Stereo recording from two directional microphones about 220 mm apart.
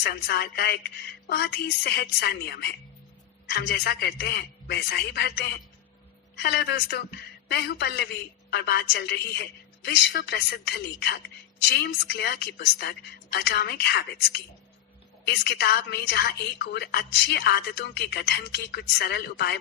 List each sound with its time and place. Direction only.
0.0 s a man's voice: 45° left (ahead or behind)